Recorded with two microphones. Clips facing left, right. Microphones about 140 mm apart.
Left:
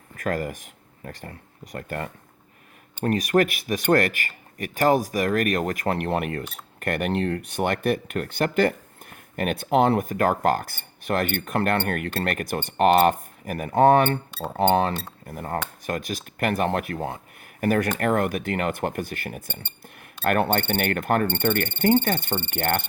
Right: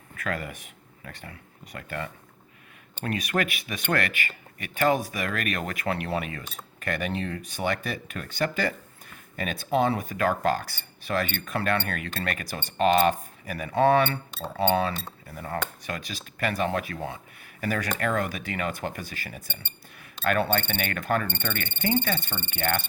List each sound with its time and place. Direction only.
0.2 s speech: 40° left (ahead or behind)